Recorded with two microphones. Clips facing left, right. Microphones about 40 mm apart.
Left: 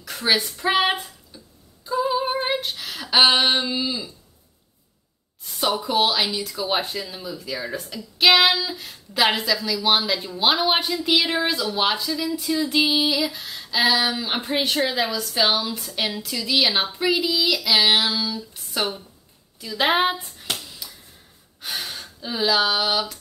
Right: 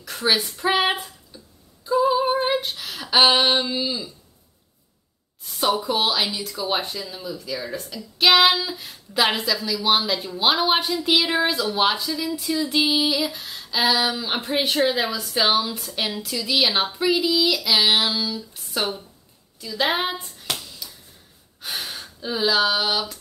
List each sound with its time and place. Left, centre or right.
0.0 s speech: centre
1.9 s female singing: centre
5.4 s speech: centre
8.2 s speech: centre
19.8 s speech: left
20.2 s hands: centre
21.5 s speech: centre